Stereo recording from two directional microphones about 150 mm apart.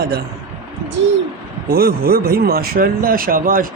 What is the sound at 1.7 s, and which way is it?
Speech, 90° right.